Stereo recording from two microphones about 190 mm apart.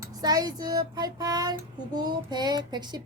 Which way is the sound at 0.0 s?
20° right (ahead or behind).